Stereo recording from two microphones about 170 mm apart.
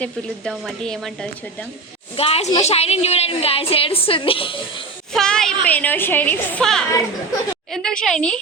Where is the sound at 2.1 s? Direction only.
35° left (ahead or behind).